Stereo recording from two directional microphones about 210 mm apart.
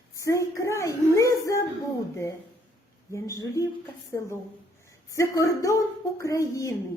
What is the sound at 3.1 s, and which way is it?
Speech, 15° left (ahead or behind).